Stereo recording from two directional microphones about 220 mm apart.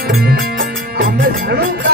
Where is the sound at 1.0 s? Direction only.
50° right (ahead or behind).